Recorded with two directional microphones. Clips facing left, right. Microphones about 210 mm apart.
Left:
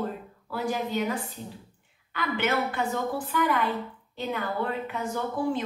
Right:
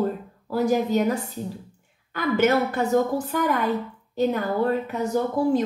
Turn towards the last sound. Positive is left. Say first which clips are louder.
# right 7 dB
turn(degrees=-40)  # may be behind; listen again after turning